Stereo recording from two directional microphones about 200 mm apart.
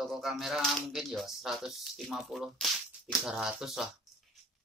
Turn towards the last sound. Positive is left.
turn(degrees=0)  # may be behind; listen again after turning